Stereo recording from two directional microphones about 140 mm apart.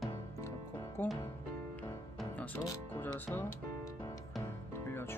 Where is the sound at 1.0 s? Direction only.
15° left (ahead or behind).